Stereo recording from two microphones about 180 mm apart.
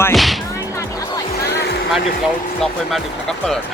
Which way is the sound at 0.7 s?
20° left (ahead or behind).